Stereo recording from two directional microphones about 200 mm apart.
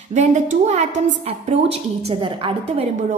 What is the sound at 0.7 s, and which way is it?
A woman's voice, 35° right (ahead or behind).